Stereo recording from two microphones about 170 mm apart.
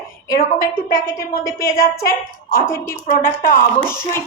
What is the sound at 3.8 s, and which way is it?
Speech, 15° left (ahead or behind).